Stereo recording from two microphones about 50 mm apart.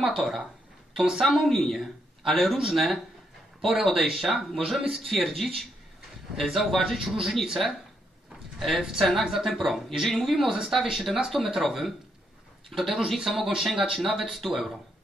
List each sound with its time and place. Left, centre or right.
0.2 s speech: centre
8.5 s speech: centre